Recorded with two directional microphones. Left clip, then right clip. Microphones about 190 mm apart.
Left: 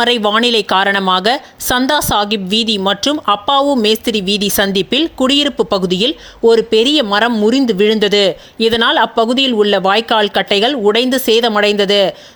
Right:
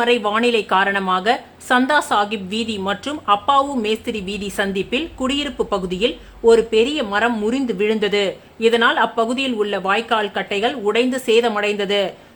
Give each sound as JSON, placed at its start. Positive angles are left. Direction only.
{"t": 0.0, "sound": "speech", "side_deg": 35}
{"t": 7.3, "sound": "speech", "side_deg": 30}